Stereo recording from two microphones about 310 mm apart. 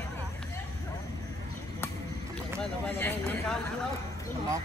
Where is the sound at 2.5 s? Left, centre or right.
Centre.